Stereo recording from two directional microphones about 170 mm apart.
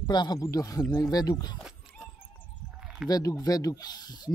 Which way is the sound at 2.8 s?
5° right (ahead or behind).